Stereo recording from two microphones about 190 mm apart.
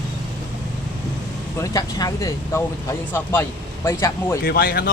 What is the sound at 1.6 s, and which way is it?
Speech, 20° left (ahead or behind).